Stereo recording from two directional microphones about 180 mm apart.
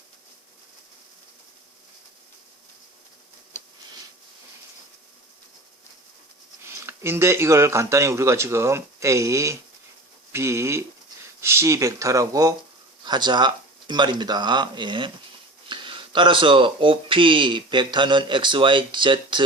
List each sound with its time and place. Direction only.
6.6 s speech: 15° right (ahead or behind)